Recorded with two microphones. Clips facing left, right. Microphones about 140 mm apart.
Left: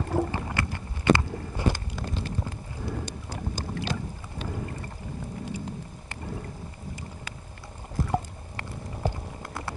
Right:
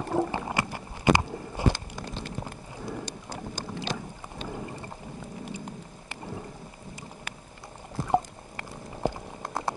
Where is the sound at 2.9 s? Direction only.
15° right (ahead or behind).